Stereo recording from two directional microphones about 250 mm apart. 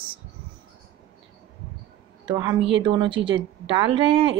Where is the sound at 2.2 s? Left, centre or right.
Centre.